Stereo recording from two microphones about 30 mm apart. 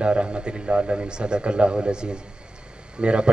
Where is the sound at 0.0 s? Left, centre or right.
Right.